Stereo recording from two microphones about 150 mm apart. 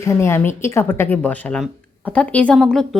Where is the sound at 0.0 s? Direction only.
15° left (ahead or behind).